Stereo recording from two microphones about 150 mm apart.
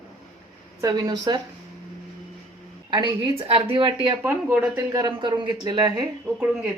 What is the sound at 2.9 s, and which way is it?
A woman's voice, 30° right (ahead or behind).